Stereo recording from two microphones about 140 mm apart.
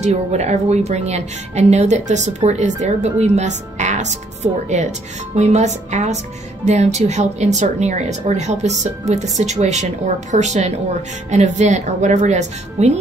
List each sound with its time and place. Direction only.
0.0 s a woman's voice: 55° right (ahead or behind)